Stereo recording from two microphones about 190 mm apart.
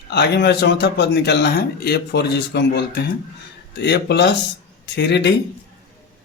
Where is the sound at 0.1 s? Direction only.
60° left (ahead or behind).